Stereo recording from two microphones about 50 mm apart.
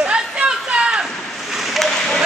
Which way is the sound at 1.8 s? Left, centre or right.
Centre.